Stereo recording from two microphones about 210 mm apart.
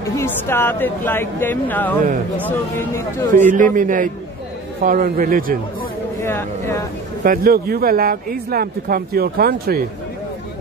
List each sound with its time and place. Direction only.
0.1 s speech: 10° left (ahead or behind)
3.3 s a man's voice: 35° right (ahead or behind)
6.2 s speech: 15° left (ahead or behind)
7.2 s a man's voice: 45° right (ahead or behind)